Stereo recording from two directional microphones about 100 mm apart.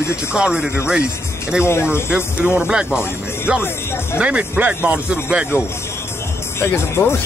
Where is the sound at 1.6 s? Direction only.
25° left (ahead or behind).